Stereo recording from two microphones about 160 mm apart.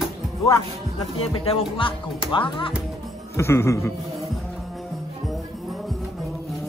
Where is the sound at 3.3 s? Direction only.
15° left (ahead or behind).